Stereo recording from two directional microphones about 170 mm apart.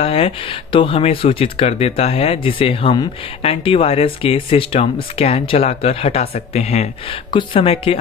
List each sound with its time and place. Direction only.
0.0 s speech: 35° left (ahead or behind)
7.2 s speech: 30° left (ahead or behind)